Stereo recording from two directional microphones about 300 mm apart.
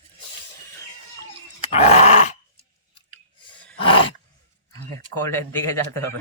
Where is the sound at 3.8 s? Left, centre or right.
Centre.